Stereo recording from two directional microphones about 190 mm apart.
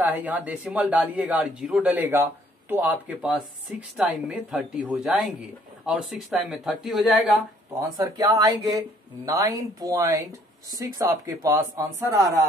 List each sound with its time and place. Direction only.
0.0 s speech: 10° right (ahead or behind)
7.7 s speech: 15° right (ahead or behind)